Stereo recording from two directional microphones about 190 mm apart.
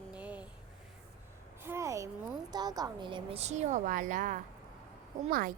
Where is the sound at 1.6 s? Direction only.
15° right (ahead or behind); by 5.5 s 50° right (ahead or behind).